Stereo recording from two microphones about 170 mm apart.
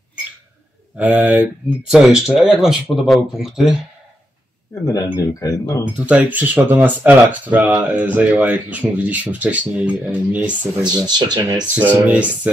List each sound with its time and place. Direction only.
0.9 s speech: 10° right (ahead or behind)
4.8 s speech: 20° left (ahead or behind)
5.9 s speech: 5° right (ahead or behind)
10.9 s speech: 25° right (ahead or behind)
11.7 s speech: 10° right (ahead or behind)